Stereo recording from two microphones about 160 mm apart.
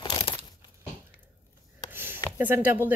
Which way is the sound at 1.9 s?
15° right (ahead or behind).